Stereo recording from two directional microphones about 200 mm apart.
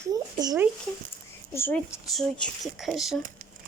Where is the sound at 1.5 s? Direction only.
10° left (ahead or behind).